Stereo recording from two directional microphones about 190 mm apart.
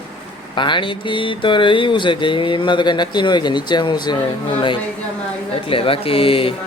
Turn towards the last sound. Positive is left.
turn(degrees=30)  # may be behind; listen again after turning